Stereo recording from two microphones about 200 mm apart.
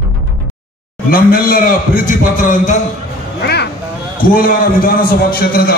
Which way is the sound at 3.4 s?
55° left (ahead or behind).